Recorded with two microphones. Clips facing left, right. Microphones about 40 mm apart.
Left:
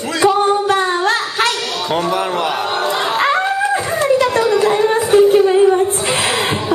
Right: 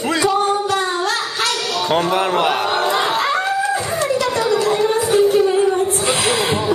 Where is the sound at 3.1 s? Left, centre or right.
Left.